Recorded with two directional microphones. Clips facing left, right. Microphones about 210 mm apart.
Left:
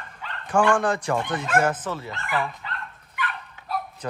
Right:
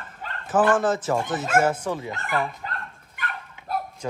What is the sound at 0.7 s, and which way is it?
Speech, centre (ahead or behind).